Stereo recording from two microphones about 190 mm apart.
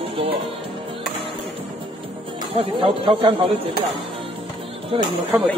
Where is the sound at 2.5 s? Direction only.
30° right (ahead or behind).